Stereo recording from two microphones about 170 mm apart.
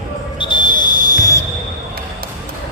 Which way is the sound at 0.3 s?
25° left (ahead or behind).